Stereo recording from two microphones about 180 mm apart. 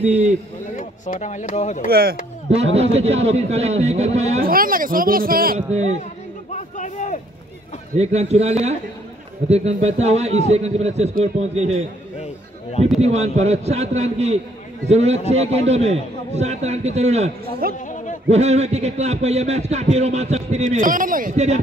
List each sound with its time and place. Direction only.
0.0 s a man's voice: 35° right (ahead or behind)
0.7 s speech: 45° left (ahead or behind)
1.9 s speech: 60° right (ahead or behind)
2.5 s a man's voice: 35° right (ahead or behind)
4.4 s speech: 55° right (ahead or behind)
6.5 s a sound: 40° left (ahead or behind)
7.9 s a man's voice: 35° right (ahead or behind)
13.0 s a man's voice: 35° right (ahead or behind)
17.7 s a sound: 45° left (ahead or behind)
18.3 s a man's voice: 40° right (ahead or behind)